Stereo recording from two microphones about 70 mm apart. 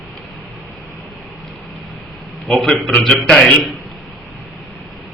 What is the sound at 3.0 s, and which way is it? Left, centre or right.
Speech, centre.